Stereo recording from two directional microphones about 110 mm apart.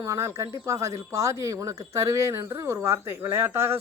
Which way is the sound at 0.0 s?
25° right (ahead or behind).